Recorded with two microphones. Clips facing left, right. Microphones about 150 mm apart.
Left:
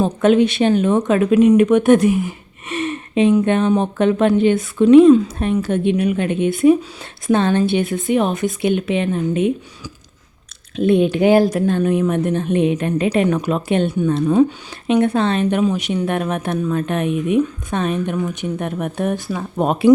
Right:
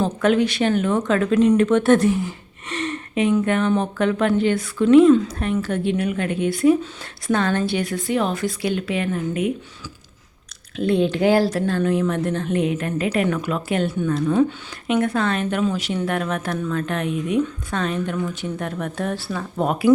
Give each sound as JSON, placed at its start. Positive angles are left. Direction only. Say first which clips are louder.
{"t": 0.0, "sound": "speech", "louder": "left 4 dB", "side_deg": 20}